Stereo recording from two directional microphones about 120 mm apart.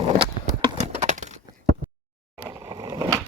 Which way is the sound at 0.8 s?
80° right.